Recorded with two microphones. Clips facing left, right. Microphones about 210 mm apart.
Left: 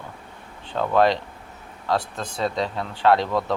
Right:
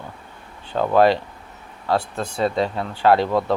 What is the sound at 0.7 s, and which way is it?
Speech, 5° right (ahead or behind).